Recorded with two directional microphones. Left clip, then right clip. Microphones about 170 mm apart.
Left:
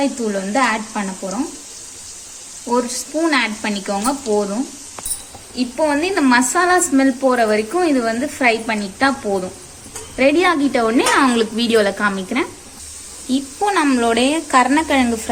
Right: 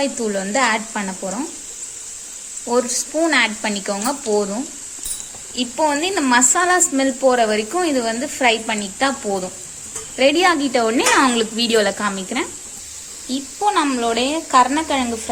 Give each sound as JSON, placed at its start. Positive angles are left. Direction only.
{"t": 0.0, "sound": "a woman's voice", "side_deg": -25}
{"t": 2.6, "sound": "a woman's voice", "side_deg": -25}
{"t": 5.5, "sound": "a woman's voice", "side_deg": -20}